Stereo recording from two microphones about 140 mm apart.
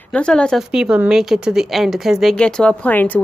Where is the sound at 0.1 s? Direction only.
5° left (ahead or behind).